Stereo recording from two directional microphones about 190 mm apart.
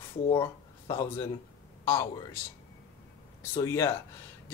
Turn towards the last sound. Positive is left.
turn(degrees=15)  # may be behind; listen again after turning